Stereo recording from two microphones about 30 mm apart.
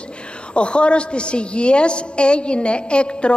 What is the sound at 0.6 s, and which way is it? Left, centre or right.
A woman's voice, left.